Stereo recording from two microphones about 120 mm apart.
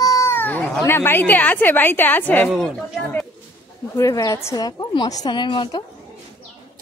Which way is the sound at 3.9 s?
30° left (ahead or behind).